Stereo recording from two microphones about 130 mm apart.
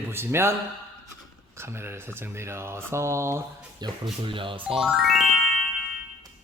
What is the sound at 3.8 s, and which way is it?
Speech, 30° right (ahead or behind).